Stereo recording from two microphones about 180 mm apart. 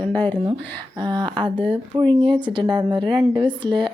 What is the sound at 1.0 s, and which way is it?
A woman's voice, 25° right (ahead or behind).